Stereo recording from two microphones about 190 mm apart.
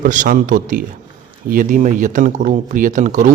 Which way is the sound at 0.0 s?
45° right (ahead or behind).